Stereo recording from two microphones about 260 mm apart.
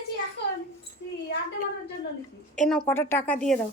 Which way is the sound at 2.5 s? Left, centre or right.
Centre.